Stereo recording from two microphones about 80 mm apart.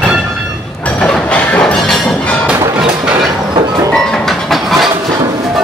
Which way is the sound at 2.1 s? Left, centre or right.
Centre.